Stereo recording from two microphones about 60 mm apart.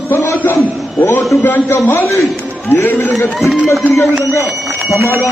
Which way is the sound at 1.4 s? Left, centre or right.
Left.